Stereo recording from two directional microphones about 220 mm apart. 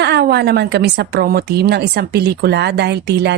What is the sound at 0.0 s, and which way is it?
A woman's voice, 50° right (ahead or behind).